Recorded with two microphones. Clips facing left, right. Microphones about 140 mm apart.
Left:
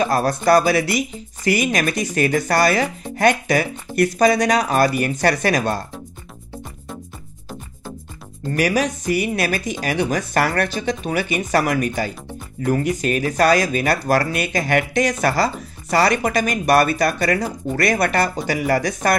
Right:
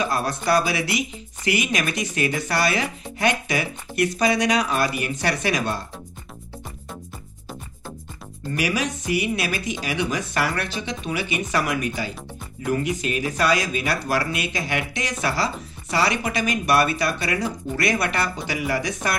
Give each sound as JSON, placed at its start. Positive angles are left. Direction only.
{"t": 0.0, "sound": "speech", "side_deg": 40}
{"t": 8.5, "sound": "speech", "side_deg": 45}